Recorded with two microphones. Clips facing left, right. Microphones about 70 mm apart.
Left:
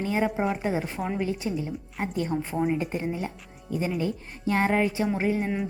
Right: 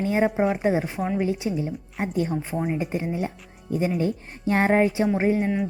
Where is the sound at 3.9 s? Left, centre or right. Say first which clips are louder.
Right 4 dB; right.